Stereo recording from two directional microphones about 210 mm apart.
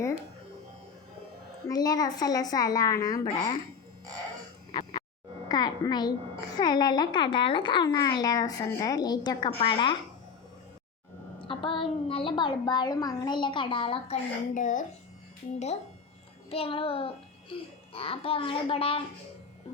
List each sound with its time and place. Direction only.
1.6 s a woman's voice: 20° left (ahead or behind)
4.7 s a sound: 25° left (ahead or behind)
5.5 s a child's voice: 20° left (ahead or behind)
11.3 s a child's voice: 25° left (ahead or behind)
14.5 s a child's voice: 35° left (ahead or behind)